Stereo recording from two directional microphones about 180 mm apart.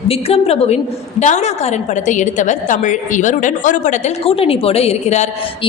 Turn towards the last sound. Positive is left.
turn(degrees=40)  # may be behind; listen again after turning